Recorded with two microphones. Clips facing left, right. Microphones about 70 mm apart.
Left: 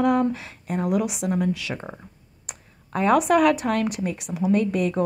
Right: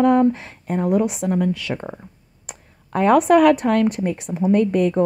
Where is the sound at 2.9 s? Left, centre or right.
Right.